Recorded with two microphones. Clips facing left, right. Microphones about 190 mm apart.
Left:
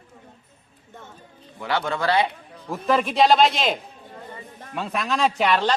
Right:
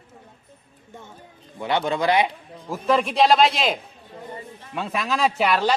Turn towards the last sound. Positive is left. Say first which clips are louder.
# even
turn(degrees=-5)  # may be behind; listen again after turning